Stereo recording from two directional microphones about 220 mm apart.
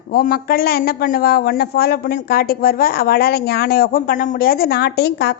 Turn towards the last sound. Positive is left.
turn(degrees=50)  # may be behind; listen again after turning